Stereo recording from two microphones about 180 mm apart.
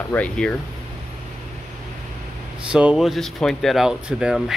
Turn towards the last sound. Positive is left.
turn(degrees=-5)  # may be behind; listen again after turning